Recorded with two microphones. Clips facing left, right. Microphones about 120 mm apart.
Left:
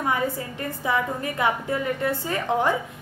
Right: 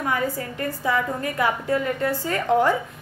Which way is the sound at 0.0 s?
20° left (ahead or behind).